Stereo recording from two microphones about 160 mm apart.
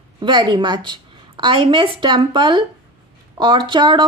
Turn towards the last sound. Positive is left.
turn(degrees=-25)  # may be behind; listen again after turning